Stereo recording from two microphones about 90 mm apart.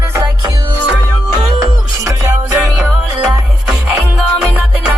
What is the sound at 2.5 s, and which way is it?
Music, 15° right (ahead or behind).